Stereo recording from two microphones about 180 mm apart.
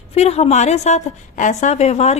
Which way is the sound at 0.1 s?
35° left (ahead or behind).